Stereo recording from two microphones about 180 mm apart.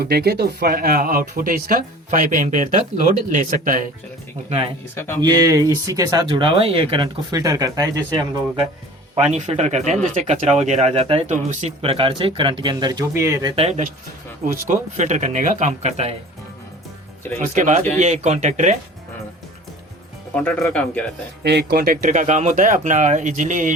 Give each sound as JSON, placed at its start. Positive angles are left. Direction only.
{"t": 0.0, "sound": "speech", "side_deg": -60}
{"t": 4.9, "sound": "speech", "side_deg": 15}
{"t": 5.2, "sound": "speech", "side_deg": -20}
{"t": 9.3, "sound": "speech", "side_deg": -40}
{"t": 11.8, "sound": "speech", "side_deg": -30}
{"t": 13.6, "sound": "speech", "side_deg": -35}
{"t": 14.4, "sound": "speech", "side_deg": -45}
{"t": 17.4, "sound": "speech", "side_deg": -45}
{"t": 20.3, "sound": "speech", "side_deg": 10}
{"t": 21.4, "sound": "speech", "side_deg": -65}